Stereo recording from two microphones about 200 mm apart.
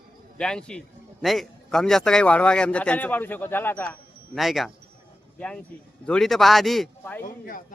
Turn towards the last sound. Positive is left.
turn(degrees=45)  # may be behind; listen again after turning